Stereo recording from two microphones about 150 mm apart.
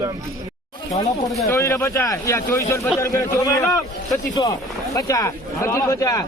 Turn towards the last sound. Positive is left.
turn(degrees=20)  # may be behind; listen again after turning